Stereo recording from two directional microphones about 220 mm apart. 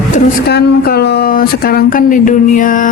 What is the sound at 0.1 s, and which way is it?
Speech, 45° left (ahead or behind).